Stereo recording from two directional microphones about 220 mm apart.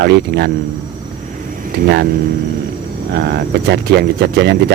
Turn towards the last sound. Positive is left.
turn(degrees=-50)  # may be behind; listen again after turning